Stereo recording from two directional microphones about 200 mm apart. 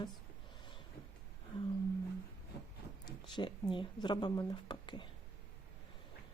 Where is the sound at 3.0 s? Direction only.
25° left (ahead or behind).